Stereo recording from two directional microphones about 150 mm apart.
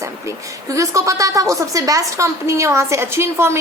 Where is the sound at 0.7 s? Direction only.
20° right (ahead or behind).